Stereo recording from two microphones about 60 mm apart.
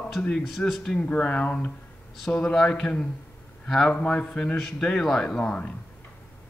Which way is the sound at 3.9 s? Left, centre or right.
Left.